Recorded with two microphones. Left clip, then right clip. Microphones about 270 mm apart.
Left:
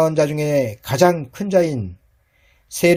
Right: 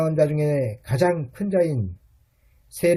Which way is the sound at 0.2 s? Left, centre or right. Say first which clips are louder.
Left 3 dB; left.